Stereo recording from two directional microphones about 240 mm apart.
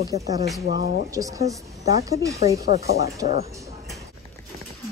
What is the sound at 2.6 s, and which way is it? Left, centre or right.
Speech, left.